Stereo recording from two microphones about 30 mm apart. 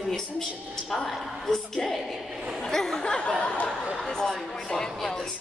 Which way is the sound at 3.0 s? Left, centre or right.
Left.